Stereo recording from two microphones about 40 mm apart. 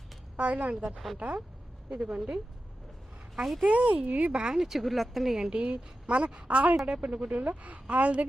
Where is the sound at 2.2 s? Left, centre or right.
Right.